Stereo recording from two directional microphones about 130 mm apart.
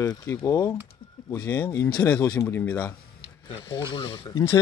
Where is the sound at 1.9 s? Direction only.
10° left (ahead or behind).